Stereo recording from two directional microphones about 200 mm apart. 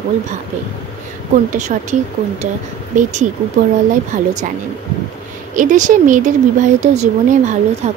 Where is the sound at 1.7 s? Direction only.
40° right (ahead or behind).